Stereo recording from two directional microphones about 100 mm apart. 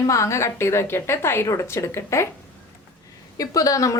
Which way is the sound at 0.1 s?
30° left (ahead or behind).